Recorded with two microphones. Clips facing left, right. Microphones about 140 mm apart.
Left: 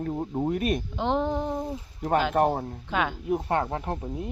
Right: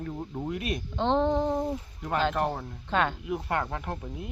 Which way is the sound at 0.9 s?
10° left (ahead or behind).